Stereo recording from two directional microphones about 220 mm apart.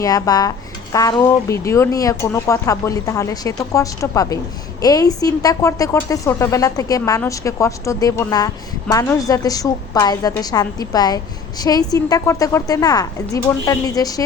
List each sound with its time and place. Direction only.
0.0 s speech: 15° left (ahead or behind)